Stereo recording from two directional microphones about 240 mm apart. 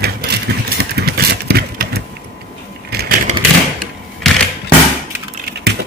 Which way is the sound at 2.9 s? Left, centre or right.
Right.